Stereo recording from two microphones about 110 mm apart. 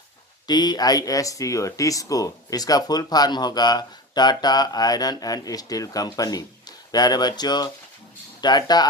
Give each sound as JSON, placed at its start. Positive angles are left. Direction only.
{"t": 0.4, "sound": "speech", "side_deg": 40}